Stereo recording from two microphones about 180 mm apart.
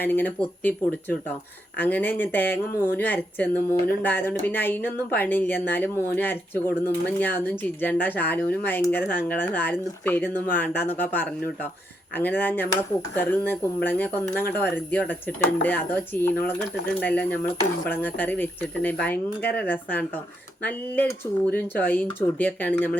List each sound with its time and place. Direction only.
0.0 s speech: 10° left (ahead or behind)
19.1 s speech: 60° left (ahead or behind)
19.5 s speech: 10° left (ahead or behind)